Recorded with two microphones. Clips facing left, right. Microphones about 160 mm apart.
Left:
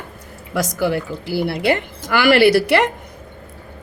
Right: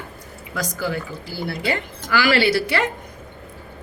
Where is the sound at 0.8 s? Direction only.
70° left (ahead or behind).